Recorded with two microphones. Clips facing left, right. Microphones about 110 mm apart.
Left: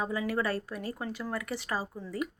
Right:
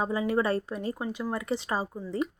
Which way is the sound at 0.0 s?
25° right (ahead or behind).